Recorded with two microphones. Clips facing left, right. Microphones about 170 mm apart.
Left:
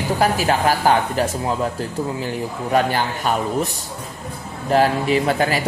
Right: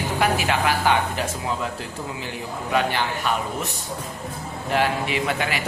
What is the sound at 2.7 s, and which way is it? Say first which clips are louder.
Speech: left 4 dB; 40° left (ahead or behind).